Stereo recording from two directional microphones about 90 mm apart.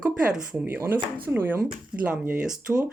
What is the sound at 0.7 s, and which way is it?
Speech, 20° right (ahead or behind).